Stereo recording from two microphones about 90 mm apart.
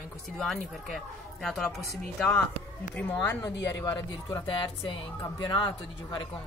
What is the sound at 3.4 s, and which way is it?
Speech, 45° left (ahead or behind).